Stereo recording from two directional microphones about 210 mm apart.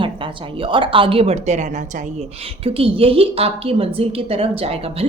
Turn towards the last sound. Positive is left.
turn(degrees=-30)  # may be behind; listen again after turning